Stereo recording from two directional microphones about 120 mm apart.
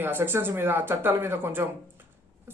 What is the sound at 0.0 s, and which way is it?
A man's voice, 20° right (ahead or behind).